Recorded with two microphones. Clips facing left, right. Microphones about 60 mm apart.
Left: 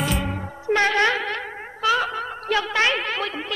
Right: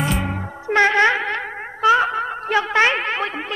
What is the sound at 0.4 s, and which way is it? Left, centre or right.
Music, right.